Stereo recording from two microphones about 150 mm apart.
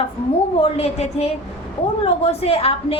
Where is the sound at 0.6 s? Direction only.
40° left (ahead or behind).